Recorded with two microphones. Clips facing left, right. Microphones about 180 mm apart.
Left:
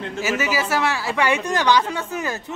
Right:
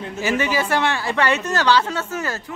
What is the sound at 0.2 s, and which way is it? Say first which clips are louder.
Speech: right 2 dB; 5° left (ahead or behind).